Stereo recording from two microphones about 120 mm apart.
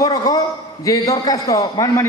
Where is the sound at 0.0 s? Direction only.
30° left (ahead or behind).